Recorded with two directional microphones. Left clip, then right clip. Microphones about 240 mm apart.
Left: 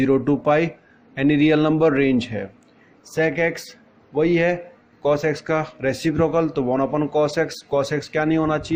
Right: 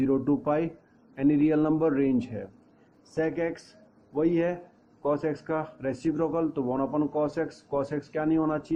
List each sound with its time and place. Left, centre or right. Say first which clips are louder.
0.0 s a man's voice: left 7 dB; left